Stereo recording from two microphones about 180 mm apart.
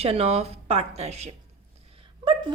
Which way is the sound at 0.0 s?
35° right (ahead or behind).